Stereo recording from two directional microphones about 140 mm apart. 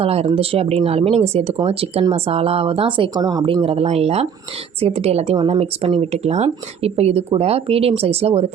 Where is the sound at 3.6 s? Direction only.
45° right (ahead or behind).